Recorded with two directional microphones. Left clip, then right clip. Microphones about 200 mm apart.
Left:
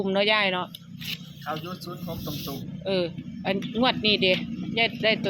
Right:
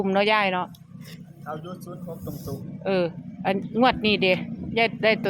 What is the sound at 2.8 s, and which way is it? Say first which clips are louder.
Speech: right 3 dB; 20° right (ahead or behind).